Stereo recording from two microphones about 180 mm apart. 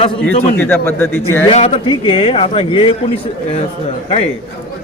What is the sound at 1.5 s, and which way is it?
A man's voice, 30° left (ahead or behind).